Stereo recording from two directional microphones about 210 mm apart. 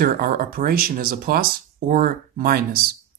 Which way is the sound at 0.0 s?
45° right (ahead or behind).